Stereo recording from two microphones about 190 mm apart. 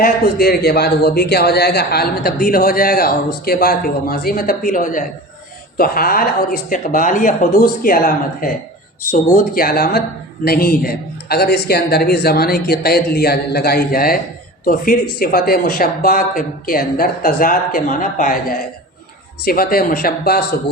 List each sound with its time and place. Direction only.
0.0 s a man's voice: 55° left (ahead or behind)